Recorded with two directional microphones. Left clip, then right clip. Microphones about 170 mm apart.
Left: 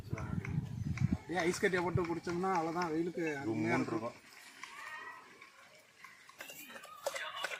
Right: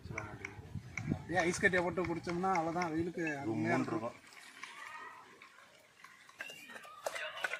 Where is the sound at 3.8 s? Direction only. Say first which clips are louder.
Even; 15° right (ahead or behind).